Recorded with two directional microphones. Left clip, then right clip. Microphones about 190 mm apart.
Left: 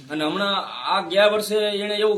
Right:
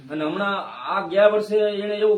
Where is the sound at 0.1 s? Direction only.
5° left (ahead or behind).